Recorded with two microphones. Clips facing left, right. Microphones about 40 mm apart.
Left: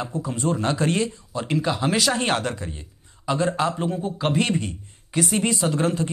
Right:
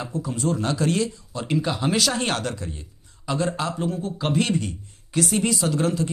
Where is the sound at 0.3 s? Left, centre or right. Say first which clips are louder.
Left 1 dB; left.